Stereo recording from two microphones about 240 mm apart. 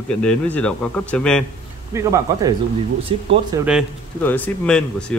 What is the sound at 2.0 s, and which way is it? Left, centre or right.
Speech, centre.